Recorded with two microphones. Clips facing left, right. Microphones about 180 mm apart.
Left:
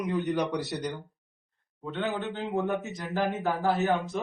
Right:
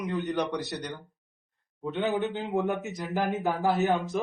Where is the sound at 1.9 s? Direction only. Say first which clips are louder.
Right 3 dB; 15° right (ahead or behind).